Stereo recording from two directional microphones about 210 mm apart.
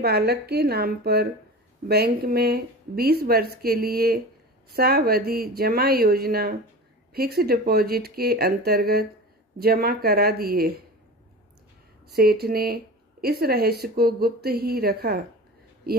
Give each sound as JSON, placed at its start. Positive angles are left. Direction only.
{"t": 0.0, "sound": "speech", "side_deg": -50}
{"t": 12.1, "sound": "speech", "side_deg": -50}